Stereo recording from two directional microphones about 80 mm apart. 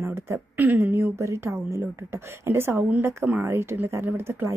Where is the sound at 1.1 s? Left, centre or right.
Right.